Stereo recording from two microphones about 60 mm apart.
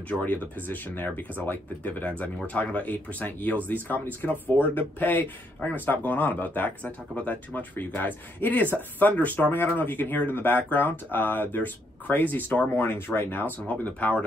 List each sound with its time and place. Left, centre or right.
0.2 s speech: left